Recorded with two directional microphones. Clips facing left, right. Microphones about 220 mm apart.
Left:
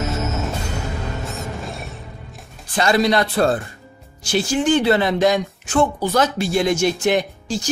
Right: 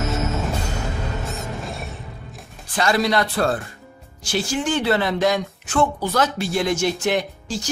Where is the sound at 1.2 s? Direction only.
Centre (ahead or behind).